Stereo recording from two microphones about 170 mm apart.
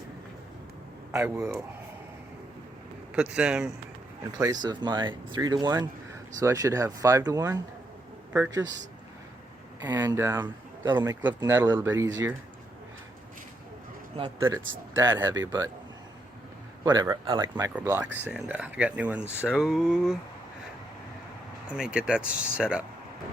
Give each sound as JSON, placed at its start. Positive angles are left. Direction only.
{"t": 1.1, "sound": "speech", "side_deg": -20}
{"t": 3.2, "sound": "speech", "side_deg": -5}
{"t": 4.3, "sound": "speech", "side_deg": -20}
{"t": 8.6, "sound": "speech", "side_deg": -90}
{"t": 9.8, "sound": "speech", "side_deg": -20}
{"t": 14.2, "sound": "speech", "side_deg": -25}
{"t": 16.8, "sound": "speech", "side_deg": -25}
{"t": 18.3, "sound": "speech", "side_deg": -5}
{"t": 21.7, "sound": "speech", "side_deg": -5}